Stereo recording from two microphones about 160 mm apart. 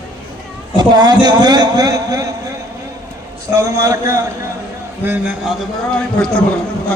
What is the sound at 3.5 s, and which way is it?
Speech, 20° right (ahead or behind).